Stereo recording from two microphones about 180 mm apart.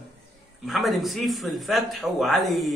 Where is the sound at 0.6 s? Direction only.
Centre (ahead or behind).